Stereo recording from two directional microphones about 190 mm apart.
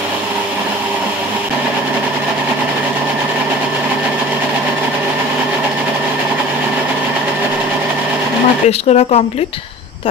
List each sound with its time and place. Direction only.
8.6 s speech: 35° left (ahead or behind)